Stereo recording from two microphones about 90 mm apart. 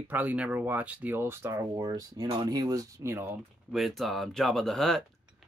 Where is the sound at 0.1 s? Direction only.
20° right (ahead or behind); by 1.9 s 35° right (ahead or behind).